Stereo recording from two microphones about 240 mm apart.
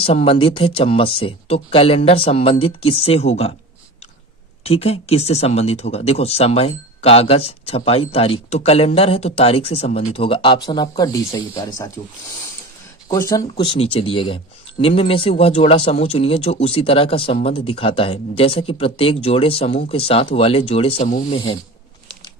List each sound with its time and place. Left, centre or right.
0.0 s a man's voice: left
4.6 s a man's voice: left
13.1 s a man's voice: centre; by 21.2 s left
21.2 s a man's voice: left